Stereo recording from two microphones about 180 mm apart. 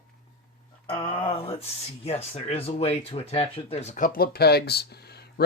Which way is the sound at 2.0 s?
35° left (ahead or behind).